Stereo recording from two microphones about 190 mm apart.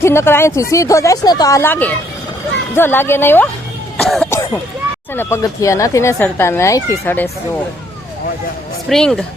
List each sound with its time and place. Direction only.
0.0 s speech: 15° left (ahead or behind)
4.0 s cough: centre (ahead or behind)
4.3 s throat clearing: 15° left (ahead or behind)
5.1 s speech: 10° left (ahead or behind)
8.9 s speech: centre (ahead or behind)